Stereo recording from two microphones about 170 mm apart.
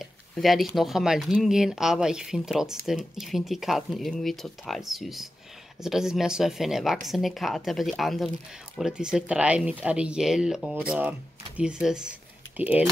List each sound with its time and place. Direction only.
0.0 s speech: centre (ahead or behind)